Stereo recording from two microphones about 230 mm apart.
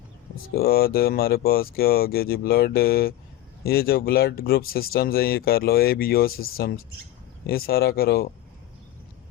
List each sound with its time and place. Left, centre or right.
0.3 s speech: left